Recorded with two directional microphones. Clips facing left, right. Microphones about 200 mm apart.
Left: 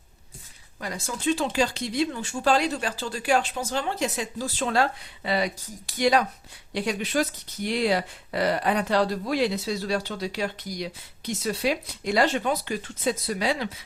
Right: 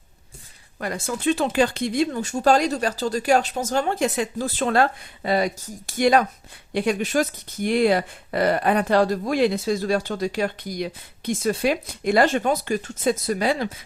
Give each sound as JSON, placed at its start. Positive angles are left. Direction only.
{"t": 0.8, "sound": "speech", "side_deg": -55}